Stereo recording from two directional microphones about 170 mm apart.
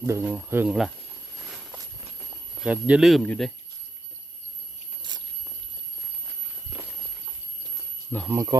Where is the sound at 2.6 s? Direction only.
5° right (ahead or behind).